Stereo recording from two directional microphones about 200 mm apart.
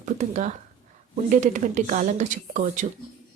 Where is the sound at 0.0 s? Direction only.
35° right (ahead or behind).